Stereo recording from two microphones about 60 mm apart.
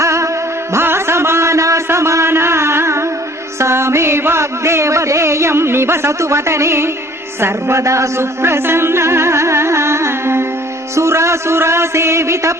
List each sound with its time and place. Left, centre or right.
0.0 s music: right
0.7 s a sound: right
3.6 s music: right
7.4 s speech: right
10.9 s music: right